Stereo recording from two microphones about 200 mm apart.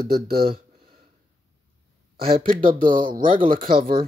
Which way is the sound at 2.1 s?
50° right (ahead or behind).